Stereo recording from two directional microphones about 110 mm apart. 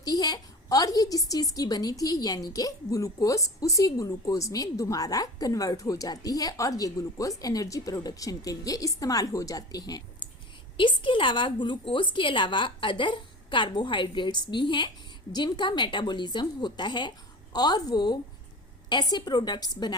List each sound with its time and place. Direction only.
0.0 s a woman's voice: 35° left (ahead or behind)
10.8 s a woman's voice: 50° left (ahead or behind)